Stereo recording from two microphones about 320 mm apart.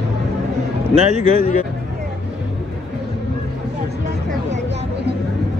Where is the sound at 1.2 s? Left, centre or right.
Centre.